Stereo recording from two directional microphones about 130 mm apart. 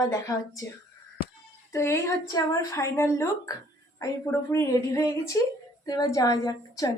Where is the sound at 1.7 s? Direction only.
20° left (ahead or behind).